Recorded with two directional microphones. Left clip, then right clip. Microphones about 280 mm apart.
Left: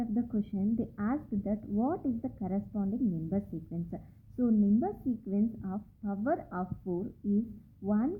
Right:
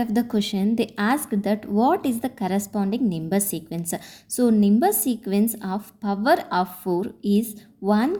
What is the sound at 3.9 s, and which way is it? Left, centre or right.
A woman's voice, right.